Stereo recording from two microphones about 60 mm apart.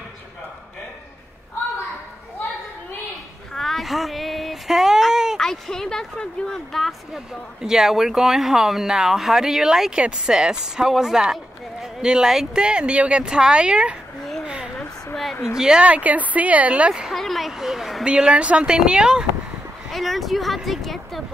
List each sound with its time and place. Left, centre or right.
3.5 s child singing: centre
5.4 s speech: centre
12.6 s speech: centre
14.4 s a sound: centre
15.5 s speech: centre
15.8 s speech: right
17.1 s speech: centre
18.0 s speech: centre
19.9 s speech: centre